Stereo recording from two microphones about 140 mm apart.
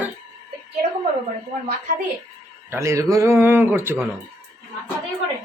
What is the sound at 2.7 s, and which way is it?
A man's voice, 20° right (ahead or behind).